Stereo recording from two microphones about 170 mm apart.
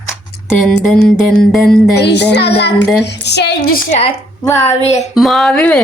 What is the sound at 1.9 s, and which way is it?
Child singing, 85° left.